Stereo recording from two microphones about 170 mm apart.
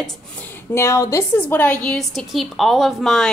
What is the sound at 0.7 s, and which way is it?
A woman's voice, 15° left (ahead or behind).